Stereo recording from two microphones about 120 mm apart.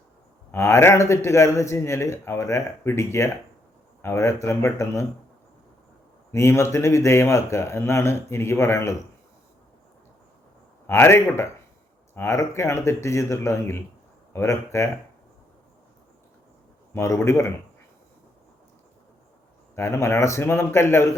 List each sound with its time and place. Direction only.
0.5 s speech: 20° left (ahead or behind)
6.3 s speech: 25° left (ahead or behind)
10.8 s speech: 20° left (ahead or behind)
16.9 s speech: 20° left (ahead or behind)
19.7 s speech: 20° left (ahead or behind)